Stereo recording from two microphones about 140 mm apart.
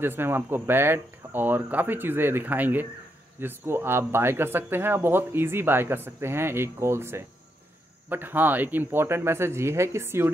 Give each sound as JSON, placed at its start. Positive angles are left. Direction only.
{"t": 0.0, "sound": "speech", "side_deg": -15}